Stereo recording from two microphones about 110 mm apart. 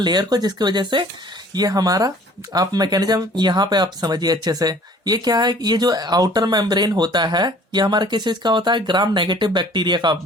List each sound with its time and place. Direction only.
0.0 s speech: 40° right (ahead or behind)